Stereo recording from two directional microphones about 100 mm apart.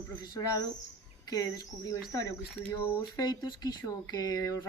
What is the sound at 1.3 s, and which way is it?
Speech, 35° left (ahead or behind).